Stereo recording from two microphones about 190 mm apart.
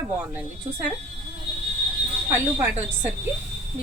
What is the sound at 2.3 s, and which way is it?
Speech, 10° right (ahead or behind).